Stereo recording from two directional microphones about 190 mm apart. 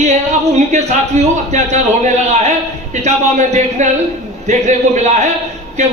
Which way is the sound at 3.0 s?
40° right (ahead or behind).